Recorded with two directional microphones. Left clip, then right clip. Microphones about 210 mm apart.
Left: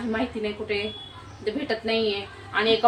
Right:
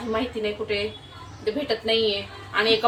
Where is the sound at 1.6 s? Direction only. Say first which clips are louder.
Right 2 dB; 15° left (ahead or behind).